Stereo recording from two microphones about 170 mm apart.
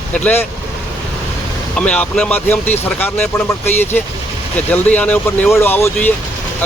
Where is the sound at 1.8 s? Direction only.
5° left (ahead or behind).